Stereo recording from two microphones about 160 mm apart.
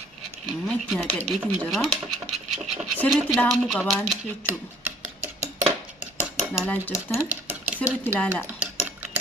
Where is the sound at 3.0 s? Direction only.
Centre (ahead or behind).